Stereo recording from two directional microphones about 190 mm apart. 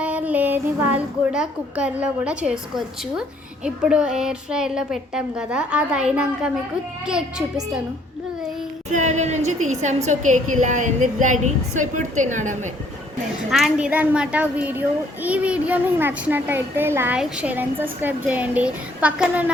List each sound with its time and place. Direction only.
0.0 s a woman's voice: 10° right (ahead or behind)
8.9 s a woman's voice: 40° right (ahead or behind)
13.5 s speech: centre (ahead or behind)